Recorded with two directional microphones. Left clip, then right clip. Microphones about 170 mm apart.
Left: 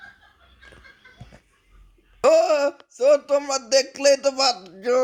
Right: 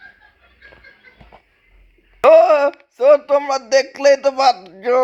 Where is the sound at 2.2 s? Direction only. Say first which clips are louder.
Right 7 dB; 20° left (ahead or behind).